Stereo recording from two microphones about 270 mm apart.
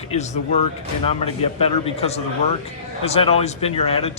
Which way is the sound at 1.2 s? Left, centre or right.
Left.